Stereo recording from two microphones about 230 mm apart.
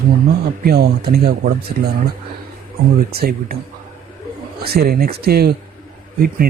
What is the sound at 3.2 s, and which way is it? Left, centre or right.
Speech, right.